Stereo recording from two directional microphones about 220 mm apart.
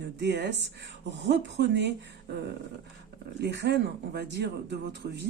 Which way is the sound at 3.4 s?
50° right (ahead or behind).